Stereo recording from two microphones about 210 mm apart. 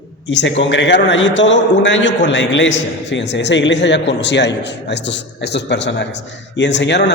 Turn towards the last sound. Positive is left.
turn(degrees=55)  # may be behind; listen again after turning